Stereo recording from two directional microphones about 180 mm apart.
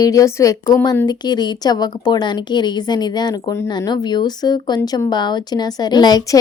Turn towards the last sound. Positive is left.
turn(degrees=20)  # may be behind; listen again after turning